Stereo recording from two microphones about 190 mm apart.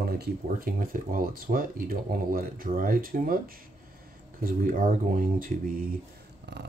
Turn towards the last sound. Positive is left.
turn(degrees=-65)  # may be behind; listen again after turning